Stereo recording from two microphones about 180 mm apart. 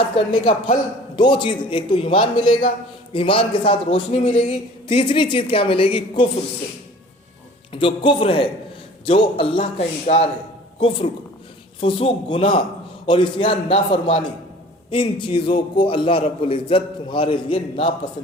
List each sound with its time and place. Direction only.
0.4 s a man's voice: 30° left (ahead or behind)
7.7 s a man's voice: 30° left (ahead or behind)